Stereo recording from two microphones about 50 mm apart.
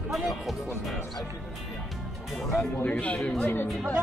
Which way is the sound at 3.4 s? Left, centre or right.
Left.